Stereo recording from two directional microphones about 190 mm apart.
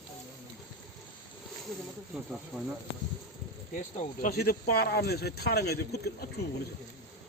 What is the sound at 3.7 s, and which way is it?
Speech, 40° left (ahead or behind).